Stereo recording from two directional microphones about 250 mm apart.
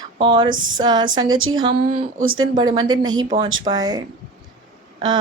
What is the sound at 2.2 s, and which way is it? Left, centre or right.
Speech, right.